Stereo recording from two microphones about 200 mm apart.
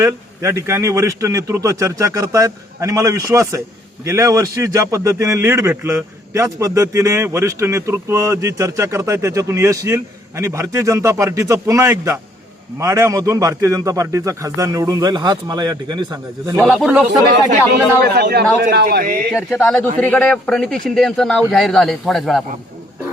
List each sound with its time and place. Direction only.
0.0 s a man's voice: 15° right (ahead or behind)
16.6 s speech: centre (ahead or behind)
18.0 s a man's voice: 55° right (ahead or behind)
19.3 s speech: centre (ahead or behind)